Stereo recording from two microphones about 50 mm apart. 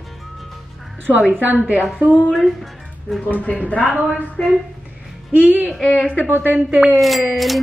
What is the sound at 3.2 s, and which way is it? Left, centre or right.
Speech, left.